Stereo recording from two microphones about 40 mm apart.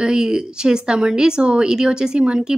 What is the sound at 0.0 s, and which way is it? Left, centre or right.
A woman's voice, right.